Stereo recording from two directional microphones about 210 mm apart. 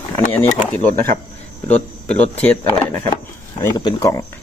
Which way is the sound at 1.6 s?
5° left (ahead or behind).